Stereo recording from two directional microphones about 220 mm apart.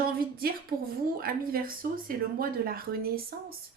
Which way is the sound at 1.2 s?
40° right (ahead or behind).